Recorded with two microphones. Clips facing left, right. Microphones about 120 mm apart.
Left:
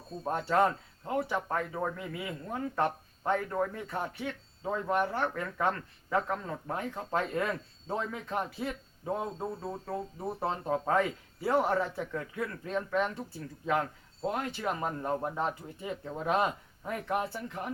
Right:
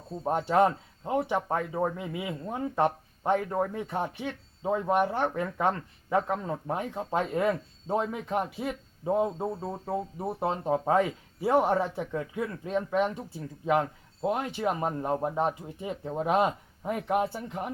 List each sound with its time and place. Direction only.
0.2 s speech: 20° right (ahead or behind)